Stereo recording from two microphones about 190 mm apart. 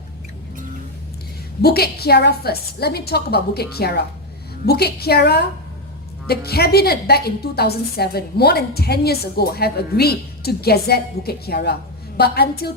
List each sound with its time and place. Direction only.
1.6 s a woman's voice: 55° left (ahead or behind)